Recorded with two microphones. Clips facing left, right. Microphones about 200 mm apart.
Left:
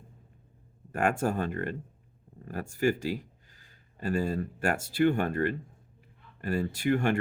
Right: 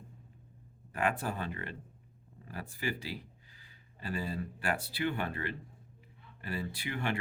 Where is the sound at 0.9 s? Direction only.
45° left (ahead or behind).